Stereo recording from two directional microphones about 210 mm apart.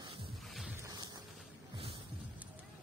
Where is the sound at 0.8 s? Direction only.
15° right (ahead or behind).